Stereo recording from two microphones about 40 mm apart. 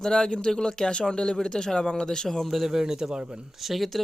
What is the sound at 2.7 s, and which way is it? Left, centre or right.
Speech, centre.